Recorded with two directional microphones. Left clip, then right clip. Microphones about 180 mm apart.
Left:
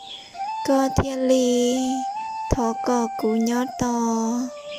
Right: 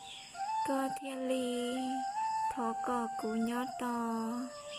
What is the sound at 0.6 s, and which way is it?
Speech, 50° left (ahead or behind).